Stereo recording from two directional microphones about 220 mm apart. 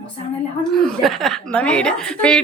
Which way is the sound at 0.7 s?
Centre (ahead or behind).